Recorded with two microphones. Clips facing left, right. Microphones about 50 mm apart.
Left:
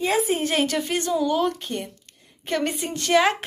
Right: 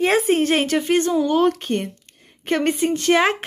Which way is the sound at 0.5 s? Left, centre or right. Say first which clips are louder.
Right 5 dB; right.